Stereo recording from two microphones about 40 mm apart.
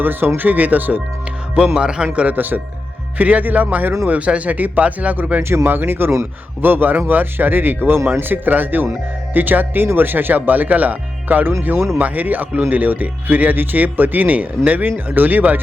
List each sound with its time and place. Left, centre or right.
0.0 s speech: right
1.7 s speech: right
2.3 s speech: right
4.3 s speech: right
5.4 s speech: right